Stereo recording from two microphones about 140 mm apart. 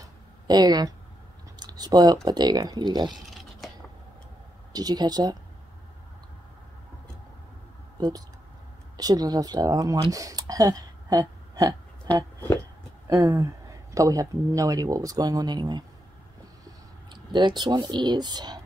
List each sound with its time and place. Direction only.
0.5 s speech: 30° right (ahead or behind)
1.6 s a sound: 30° right (ahead or behind)
2.2 s speech: 30° right (ahead or behind)
3.6 s a sound: centre (ahead or behind)
4.7 s speech: 30° right (ahead or behind)
8.9 s speech: 25° right (ahead or behind)